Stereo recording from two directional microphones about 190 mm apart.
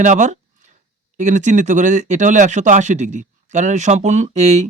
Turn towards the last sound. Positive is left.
turn(degrees=-35)  # may be behind; listen again after turning